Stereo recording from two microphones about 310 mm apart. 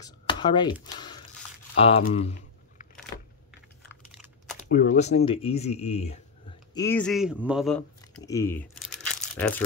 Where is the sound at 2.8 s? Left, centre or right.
Left.